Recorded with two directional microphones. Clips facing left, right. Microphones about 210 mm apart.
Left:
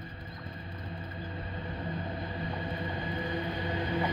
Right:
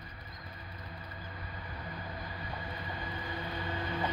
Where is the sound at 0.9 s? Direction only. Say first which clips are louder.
Left 7 dB; 30° left (ahead or behind).